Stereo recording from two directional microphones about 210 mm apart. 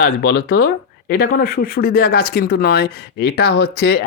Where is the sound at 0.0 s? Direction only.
50° left (ahead or behind).